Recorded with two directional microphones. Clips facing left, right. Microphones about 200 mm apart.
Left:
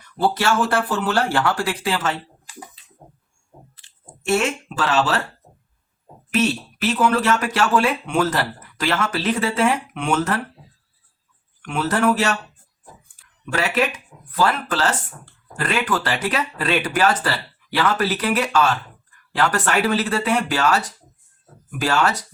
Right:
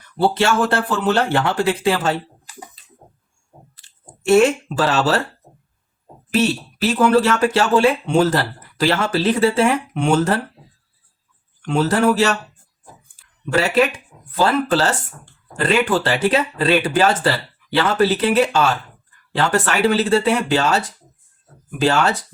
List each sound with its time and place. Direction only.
0.3 s speech: 25° right (ahead or behind)
4.4 s speech: 35° right (ahead or behind)
6.3 s speech: 30° right (ahead or behind)
11.6 s speech: 30° right (ahead or behind)
13.4 s speech: 30° right (ahead or behind)